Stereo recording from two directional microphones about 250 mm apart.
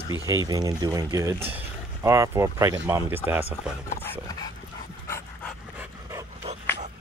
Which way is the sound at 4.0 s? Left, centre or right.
Centre.